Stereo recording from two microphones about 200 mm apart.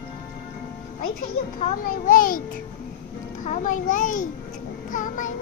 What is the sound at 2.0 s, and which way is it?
A child's voice, 45° left (ahead or behind).